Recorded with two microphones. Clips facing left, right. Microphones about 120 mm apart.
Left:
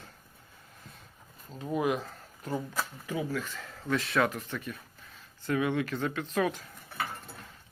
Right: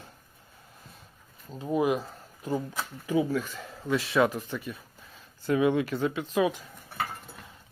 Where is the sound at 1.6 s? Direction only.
15° right (ahead or behind).